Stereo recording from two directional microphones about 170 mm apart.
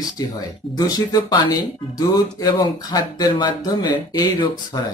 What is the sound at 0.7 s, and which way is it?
Speech, 20° left (ahead or behind).